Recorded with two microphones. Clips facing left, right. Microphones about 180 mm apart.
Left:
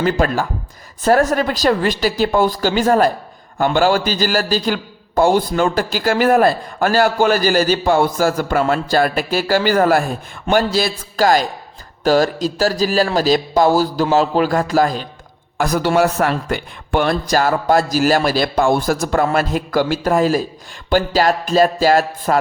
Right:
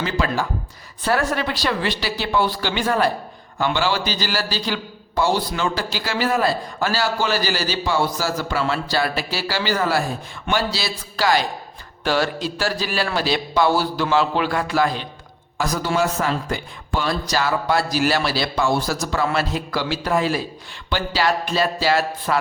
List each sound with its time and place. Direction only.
0.0 s a man's voice: 50° left (ahead or behind)
15.5 s a man's voice: 55° left (ahead or behind)